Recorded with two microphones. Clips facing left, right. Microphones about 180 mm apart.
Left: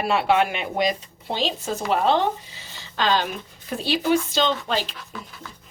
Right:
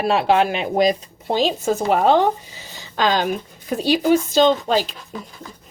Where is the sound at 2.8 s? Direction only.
45° right (ahead or behind).